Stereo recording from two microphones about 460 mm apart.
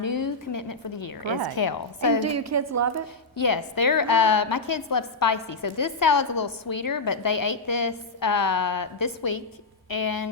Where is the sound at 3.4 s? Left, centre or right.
Left.